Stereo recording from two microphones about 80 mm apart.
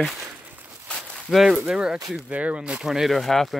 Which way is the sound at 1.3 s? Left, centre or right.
Centre.